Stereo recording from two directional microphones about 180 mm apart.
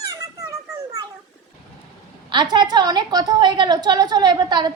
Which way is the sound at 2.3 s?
25° right (ahead or behind).